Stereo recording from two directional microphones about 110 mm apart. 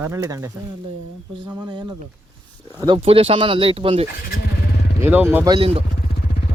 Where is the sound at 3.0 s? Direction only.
60° right (ahead or behind).